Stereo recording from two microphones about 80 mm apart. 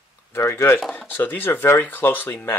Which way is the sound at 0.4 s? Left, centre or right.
Left.